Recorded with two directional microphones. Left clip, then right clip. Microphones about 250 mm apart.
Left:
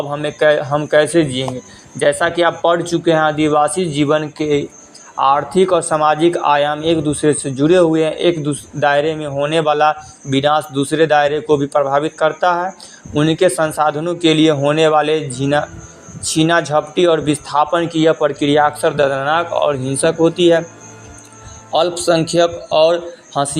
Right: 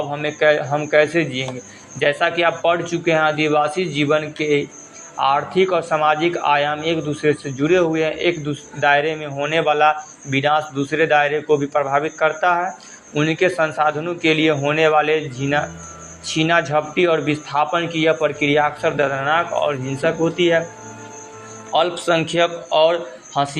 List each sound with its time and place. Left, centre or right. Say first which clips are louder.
0.1 s speech: left 3 dB; left
21.7 s speech: left 2 dB; left
22.8 s a man's voice: left 3 dB; left